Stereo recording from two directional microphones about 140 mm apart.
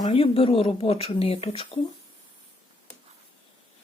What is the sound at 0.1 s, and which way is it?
Speech, 40° left (ahead or behind).